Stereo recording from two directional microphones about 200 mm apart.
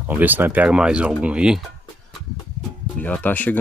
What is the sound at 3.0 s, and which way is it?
Speech, 10° left (ahead or behind).